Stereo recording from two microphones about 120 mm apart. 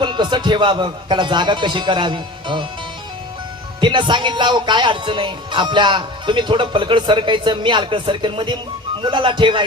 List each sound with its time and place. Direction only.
0.0 s speech: 40° right (ahead or behind)
3.8 s speech: 40° right (ahead or behind)